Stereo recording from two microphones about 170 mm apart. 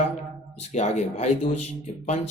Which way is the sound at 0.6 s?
40° left (ahead or behind).